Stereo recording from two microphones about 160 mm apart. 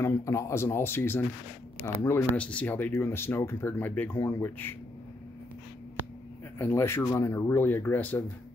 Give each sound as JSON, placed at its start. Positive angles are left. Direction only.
{"t": 0.0, "sound": "speech", "side_deg": 20}
{"t": 6.6, "sound": "speech", "side_deg": 15}